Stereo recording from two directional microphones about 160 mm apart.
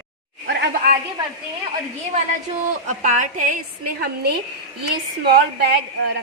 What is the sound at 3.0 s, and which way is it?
A woman's voice, 55° right (ahead or behind).